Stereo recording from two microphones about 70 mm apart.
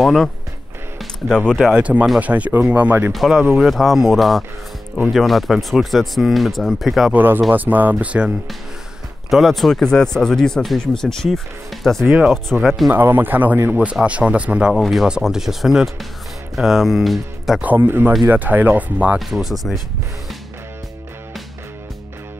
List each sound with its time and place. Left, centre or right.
0.0 s speech: centre
1.7 s speech: centre
3.1 s speech: centre
7.2 s speech: right
9.3 s speech: centre
12.9 s speech: right
14.7 s speech: centre
17.6 s speech: right
19.1 s speech: centre